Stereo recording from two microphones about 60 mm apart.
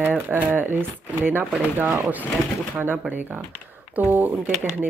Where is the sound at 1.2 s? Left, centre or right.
Right.